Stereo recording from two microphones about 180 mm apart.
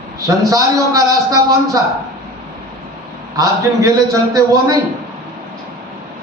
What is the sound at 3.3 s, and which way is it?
Speech, 20° right (ahead or behind).